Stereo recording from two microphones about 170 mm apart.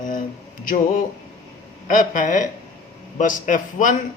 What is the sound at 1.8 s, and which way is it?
Speech, 50° left (ahead or behind).